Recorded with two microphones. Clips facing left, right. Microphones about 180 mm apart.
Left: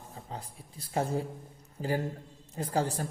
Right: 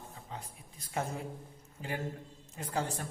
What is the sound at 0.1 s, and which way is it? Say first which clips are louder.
A man's voice: left 3 dB; 35° left (ahead or behind).